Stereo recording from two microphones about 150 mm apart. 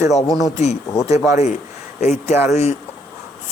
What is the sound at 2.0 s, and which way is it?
Speech, 50° left (ahead or behind).